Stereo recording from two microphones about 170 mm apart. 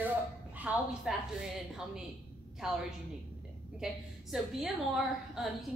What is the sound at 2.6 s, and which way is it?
Speech, 5° right (ahead or behind).